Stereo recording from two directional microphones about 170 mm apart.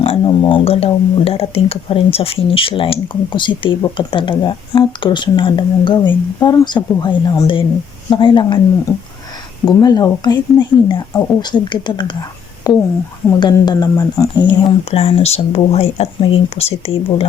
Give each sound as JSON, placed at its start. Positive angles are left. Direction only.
{"t": 0.0, "sound": "speech", "side_deg": 30}
{"t": 9.6, "sound": "speech", "side_deg": 25}
{"t": 14.8, "sound": "speech", "side_deg": 35}